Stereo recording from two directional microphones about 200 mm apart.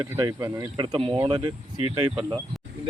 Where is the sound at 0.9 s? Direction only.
25° right (ahead or behind).